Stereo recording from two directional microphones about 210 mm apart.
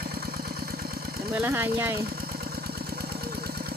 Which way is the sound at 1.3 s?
10° right (ahead or behind).